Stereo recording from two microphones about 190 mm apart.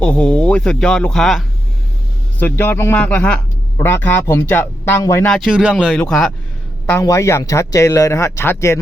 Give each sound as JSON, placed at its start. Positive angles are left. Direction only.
{"t": 0.0, "sound": "speech", "side_deg": 5}
{"t": 5.3, "sound": "speech", "side_deg": 0}
{"t": 6.9, "sound": "speech", "side_deg": 15}